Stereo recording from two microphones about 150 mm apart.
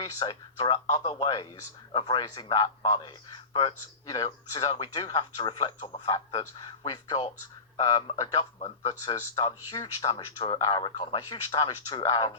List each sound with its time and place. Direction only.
0.0 s a man's voice: 30° left (ahead or behind)
8.5 s a man's voice: 45° left (ahead or behind)